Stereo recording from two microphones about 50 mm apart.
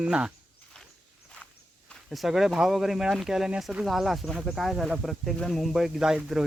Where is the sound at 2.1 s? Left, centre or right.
Centre.